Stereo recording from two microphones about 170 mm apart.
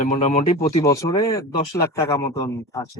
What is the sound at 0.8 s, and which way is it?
Speech, 20° left (ahead or behind).